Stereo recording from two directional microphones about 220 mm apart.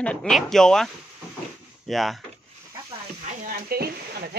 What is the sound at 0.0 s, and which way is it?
Speech, 5° left (ahead or behind).